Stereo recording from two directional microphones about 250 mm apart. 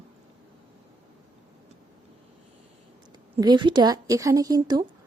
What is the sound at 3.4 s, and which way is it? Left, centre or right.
Speech, centre.